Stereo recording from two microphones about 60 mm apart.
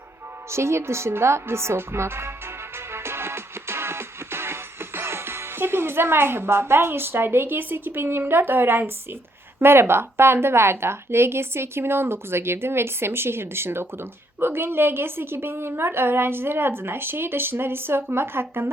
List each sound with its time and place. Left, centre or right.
0.5 s speech: right
2.7 s music: right
9.6 s a woman's voice: right